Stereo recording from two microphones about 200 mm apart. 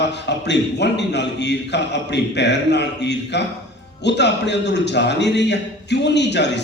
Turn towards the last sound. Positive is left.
turn(degrees=60)  # may be behind; listen again after turning